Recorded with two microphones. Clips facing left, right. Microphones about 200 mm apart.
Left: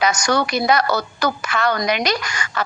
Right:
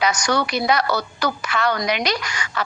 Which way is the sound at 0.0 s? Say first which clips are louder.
Left 2 dB; 45° left (ahead or behind).